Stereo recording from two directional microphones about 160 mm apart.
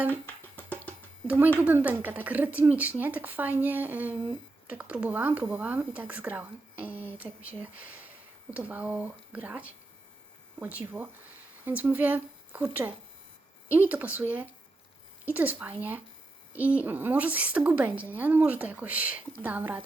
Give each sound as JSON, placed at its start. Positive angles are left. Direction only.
{"t": 0.1, "sound": "music", "side_deg": 10}
{"t": 1.5, "sound": "speech", "side_deg": -10}